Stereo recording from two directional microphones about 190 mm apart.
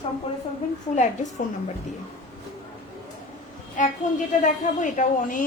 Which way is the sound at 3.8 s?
40° left (ahead or behind).